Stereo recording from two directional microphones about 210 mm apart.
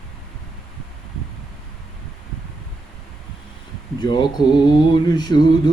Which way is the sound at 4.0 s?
20° left (ahead or behind).